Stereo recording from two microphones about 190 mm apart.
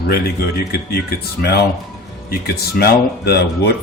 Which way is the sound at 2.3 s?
55° left (ahead or behind).